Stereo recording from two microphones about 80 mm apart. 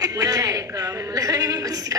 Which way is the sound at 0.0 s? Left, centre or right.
Right.